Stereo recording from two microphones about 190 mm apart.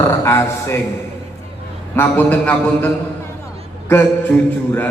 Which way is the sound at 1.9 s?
10° left (ahead or behind).